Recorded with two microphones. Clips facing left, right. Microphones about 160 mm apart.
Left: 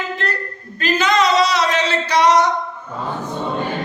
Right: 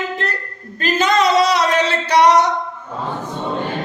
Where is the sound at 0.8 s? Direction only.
50° right (ahead or behind).